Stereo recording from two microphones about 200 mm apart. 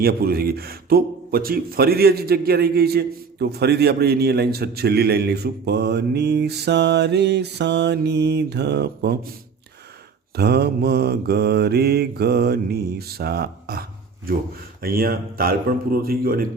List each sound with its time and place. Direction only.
0.0 s speech: 50° right (ahead or behind)
10.3 s speech: 55° right (ahead or behind)